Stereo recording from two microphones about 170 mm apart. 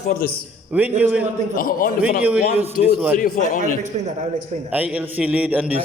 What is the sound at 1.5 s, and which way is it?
A man's voice, 55° left (ahead or behind).